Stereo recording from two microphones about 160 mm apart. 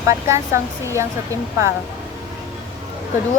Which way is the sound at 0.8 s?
20° right (ahead or behind).